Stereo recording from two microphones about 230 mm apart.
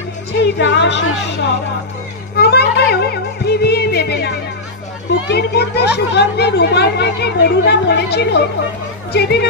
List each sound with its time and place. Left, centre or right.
0.3 s speech: left
2.3 s music: left
5.3 s speech: left